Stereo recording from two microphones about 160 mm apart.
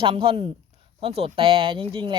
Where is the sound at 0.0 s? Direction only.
35° right (ahead or behind).